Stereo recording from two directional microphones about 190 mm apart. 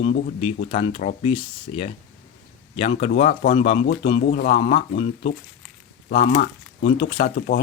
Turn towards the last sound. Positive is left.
turn(degrees=50)  # may be behind; listen again after turning